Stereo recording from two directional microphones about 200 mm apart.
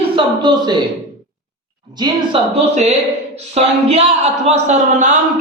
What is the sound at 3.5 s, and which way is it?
Speech, 30° right (ahead or behind).